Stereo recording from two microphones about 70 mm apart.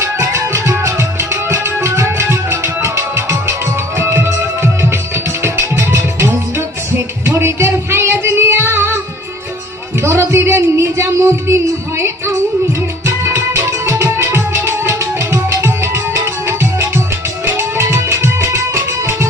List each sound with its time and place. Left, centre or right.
0.0 s music: right
10.0 s music: right
13.7 s music: right